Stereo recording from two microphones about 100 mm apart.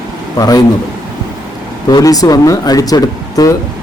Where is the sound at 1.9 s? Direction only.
40° left (ahead or behind).